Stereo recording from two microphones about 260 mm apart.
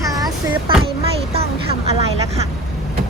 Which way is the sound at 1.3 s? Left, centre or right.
Right.